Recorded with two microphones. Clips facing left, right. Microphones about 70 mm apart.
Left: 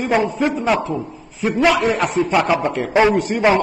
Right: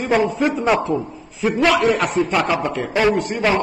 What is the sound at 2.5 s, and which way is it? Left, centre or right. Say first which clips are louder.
A man's voice: left 3 dB; left.